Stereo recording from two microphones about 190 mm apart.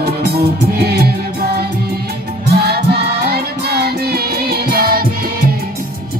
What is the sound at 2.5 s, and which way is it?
Music, 60° right (ahead or behind).